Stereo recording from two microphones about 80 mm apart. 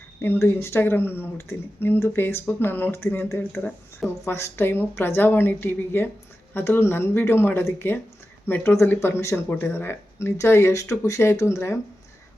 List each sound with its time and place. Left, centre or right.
0.2 s speech: left